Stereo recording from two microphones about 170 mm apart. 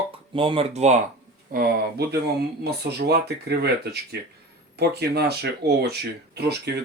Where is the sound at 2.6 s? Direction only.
70° right (ahead or behind).